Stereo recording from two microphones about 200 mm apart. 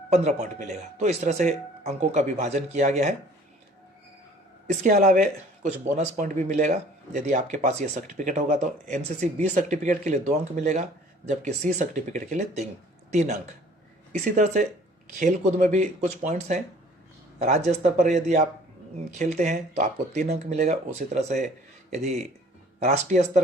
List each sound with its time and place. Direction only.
0.1 s speech: 35° right (ahead or behind)
4.6 s speech: 35° right (ahead or behind)